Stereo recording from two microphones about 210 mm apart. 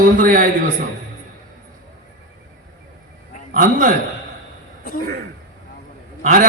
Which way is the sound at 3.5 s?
40° right (ahead or behind).